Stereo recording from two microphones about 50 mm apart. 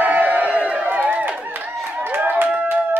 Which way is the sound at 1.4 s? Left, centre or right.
Right.